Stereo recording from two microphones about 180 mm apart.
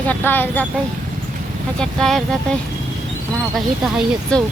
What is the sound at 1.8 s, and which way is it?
Speech, 5° left (ahead or behind).